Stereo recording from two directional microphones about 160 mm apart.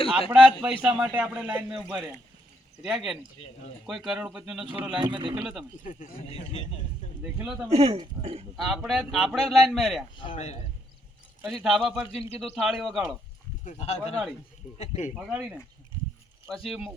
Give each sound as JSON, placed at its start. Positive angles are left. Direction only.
{"t": 0.3, "sound": "a man's voice", "side_deg": -5}
{"t": 2.8, "sound": "a man's voice", "side_deg": -5}
{"t": 4.9, "sound": "speech", "side_deg": -30}
{"t": 5.4, "sound": "speech", "side_deg": -5}
{"t": 5.8, "sound": "speech", "side_deg": 50}
{"t": 7.3, "sound": "a man's voice", "side_deg": -10}
{"t": 7.7, "sound": "speech", "side_deg": -40}
{"t": 8.5, "sound": "speech", "side_deg": -5}
{"t": 10.3, "sound": "speech", "side_deg": 45}
{"t": 11.4, "sound": "speech", "side_deg": 0}
{"t": 13.7, "sound": "speech", "side_deg": 40}
{"t": 15.1, "sound": "a man's voice", "side_deg": -5}